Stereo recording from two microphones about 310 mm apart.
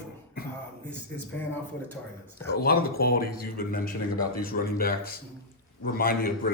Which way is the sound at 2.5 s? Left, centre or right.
Left.